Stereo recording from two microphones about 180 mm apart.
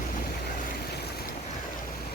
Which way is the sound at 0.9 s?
65° left (ahead or behind).